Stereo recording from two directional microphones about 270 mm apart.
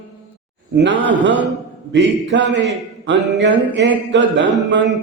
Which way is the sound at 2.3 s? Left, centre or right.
Right.